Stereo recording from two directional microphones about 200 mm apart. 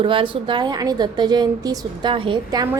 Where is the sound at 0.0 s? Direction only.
25° right (ahead or behind).